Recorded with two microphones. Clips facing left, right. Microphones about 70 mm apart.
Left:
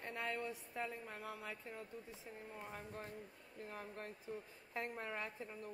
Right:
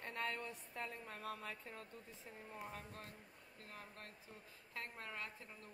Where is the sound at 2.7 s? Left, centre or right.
Left.